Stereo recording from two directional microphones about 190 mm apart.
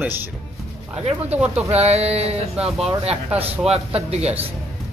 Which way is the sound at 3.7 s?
30° right (ahead or behind).